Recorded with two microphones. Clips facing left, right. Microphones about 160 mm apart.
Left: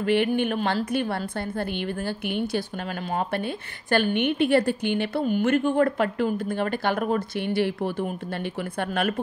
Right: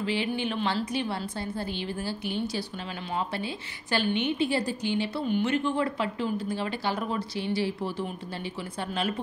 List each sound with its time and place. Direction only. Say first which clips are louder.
0.0 s a woman's voice: left 7 dB; 55° left (ahead or behind)